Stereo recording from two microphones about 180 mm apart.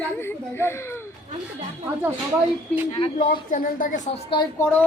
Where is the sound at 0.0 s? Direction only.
10° left (ahead or behind).